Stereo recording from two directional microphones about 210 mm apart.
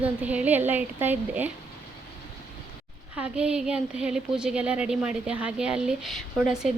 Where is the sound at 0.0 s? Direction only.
5° right (ahead or behind).